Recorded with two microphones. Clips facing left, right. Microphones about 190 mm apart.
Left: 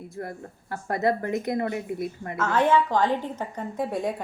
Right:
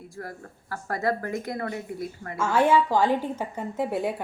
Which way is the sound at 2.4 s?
10° right (ahead or behind).